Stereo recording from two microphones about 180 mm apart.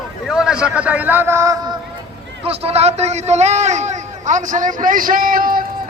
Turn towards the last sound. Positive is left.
turn(degrees=-50)  # may be behind; listen again after turning